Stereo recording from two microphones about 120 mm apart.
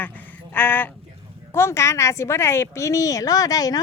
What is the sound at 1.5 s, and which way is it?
Speech, 20° left (ahead or behind).